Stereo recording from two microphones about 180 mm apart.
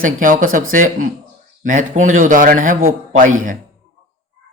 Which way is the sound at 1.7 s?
45° right (ahead or behind).